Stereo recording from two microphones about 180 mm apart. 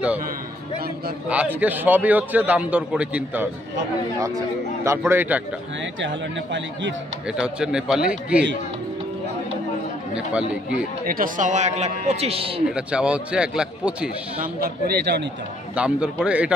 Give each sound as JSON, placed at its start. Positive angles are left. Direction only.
{"t": 1.6, "sound": "a man's voice", "side_deg": -10}
{"t": 4.8, "sound": "a man's voice", "side_deg": -15}
{"t": 5.9, "sound": "speech", "side_deg": -90}
{"t": 7.2, "sound": "a man's voice", "side_deg": -5}
{"t": 11.1, "sound": "a man's voice", "side_deg": -50}
{"t": 12.7, "sound": "a man's voice", "side_deg": -5}
{"t": 14.6, "sound": "a man's voice", "side_deg": -65}
{"t": 15.7, "sound": "a man's voice", "side_deg": -5}